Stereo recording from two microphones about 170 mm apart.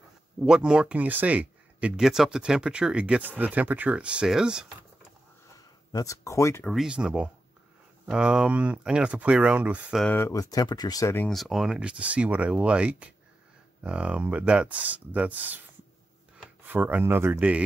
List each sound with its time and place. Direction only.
0.4 s speech: 5° right (ahead or behind)
5.9 s speech: 20° left (ahead or behind)
6.6 s speech: centre (ahead or behind)
10.0 s speech: 15° left (ahead or behind)
11.2 s speech: centre (ahead or behind)
16.6 s speech: 10° right (ahead or behind)